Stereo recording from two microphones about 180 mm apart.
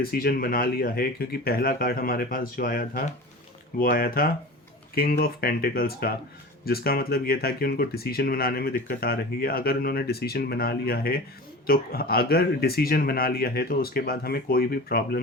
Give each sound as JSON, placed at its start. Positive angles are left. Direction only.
{"t": 0.0, "sound": "speech", "side_deg": 55}